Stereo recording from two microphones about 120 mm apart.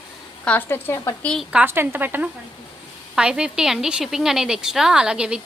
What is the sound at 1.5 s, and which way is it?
A woman's voice, 20° right (ahead or behind).